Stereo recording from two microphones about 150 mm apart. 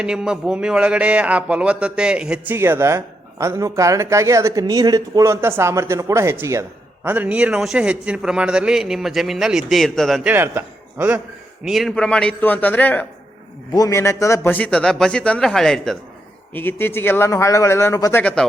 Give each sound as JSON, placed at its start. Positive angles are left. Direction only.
{"t": 0.0, "sound": "a man's voice", "side_deg": -5}
{"t": 10.3, "sound": "a man's voice", "side_deg": -15}
{"t": 11.6, "sound": "a man's voice", "side_deg": 0}
{"t": 13.7, "sound": "a man's voice", "side_deg": 20}
{"t": 16.6, "sound": "a man's voice", "side_deg": 15}
{"t": 18.2, "sound": "a man's voice", "side_deg": 5}